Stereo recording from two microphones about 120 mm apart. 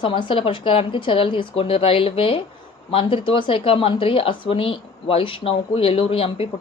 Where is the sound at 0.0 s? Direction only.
45° left (ahead or behind).